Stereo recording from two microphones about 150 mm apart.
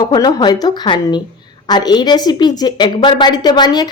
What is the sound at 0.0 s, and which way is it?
A woman's voice, 30° left (ahead or behind).